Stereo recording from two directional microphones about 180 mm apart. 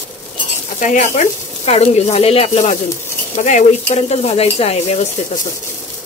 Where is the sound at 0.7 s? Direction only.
45° left (ahead or behind).